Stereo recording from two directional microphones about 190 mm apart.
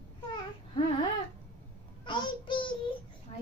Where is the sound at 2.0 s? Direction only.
25° left (ahead or behind).